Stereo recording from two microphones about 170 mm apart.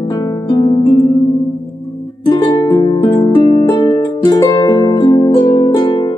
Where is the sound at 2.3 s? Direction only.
30° left (ahead or behind).